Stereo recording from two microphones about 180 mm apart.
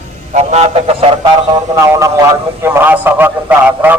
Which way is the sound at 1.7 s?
15° right (ahead or behind).